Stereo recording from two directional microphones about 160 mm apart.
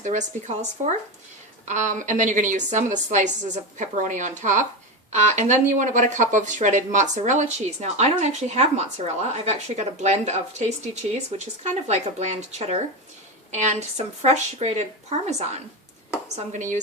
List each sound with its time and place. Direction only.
0.0 s a woman's voice: 50° right (ahead or behind)
16.5 s a woman's voice: 50° right (ahead or behind)